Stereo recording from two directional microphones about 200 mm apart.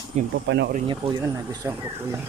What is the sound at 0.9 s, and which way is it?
Speech, 25° right (ahead or behind).